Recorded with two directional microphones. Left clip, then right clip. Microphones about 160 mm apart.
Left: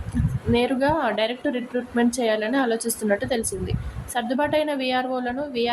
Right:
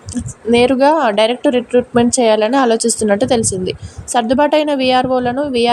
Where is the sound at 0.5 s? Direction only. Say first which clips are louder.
Right 11 dB; 40° right (ahead or behind).